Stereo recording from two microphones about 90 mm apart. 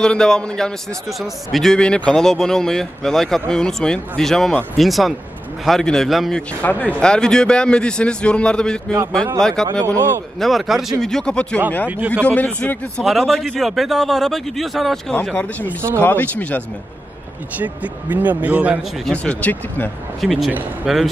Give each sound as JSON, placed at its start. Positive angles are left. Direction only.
{"t": 0.0, "sound": "a man's voice", "side_deg": 10}
{"t": 6.6, "sound": "a man's voice", "side_deg": 20}
{"t": 13.0, "sound": "speech", "side_deg": 0}
{"t": 16.0, "sound": "speech", "side_deg": 20}
{"t": 17.6, "sound": "speech", "side_deg": -20}
{"t": 19.1, "sound": "a man's voice", "side_deg": 15}
{"t": 20.2, "sound": "speech", "side_deg": 0}